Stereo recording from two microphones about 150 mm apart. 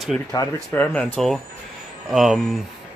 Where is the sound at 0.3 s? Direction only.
25° left (ahead or behind).